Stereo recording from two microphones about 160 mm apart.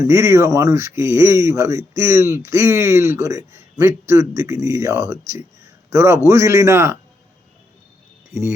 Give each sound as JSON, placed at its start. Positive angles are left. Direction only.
{"t": 0.0, "sound": "speech", "side_deg": -15}
{"t": 8.3, "sound": "speech", "side_deg": -15}